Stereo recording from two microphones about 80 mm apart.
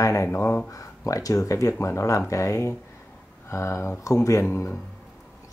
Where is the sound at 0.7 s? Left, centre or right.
Left.